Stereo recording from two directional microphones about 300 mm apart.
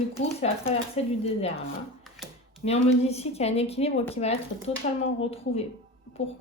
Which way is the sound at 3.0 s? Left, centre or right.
Left.